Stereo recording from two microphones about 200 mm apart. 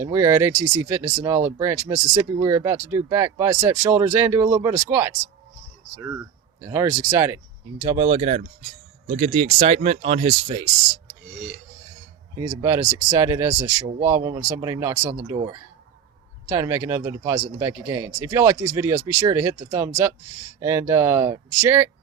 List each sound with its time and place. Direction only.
0.0 s speech: 15° right (ahead or behind)
6.6 s speech: 15° right (ahead or behind)
12.4 s speech: 15° right (ahead or behind)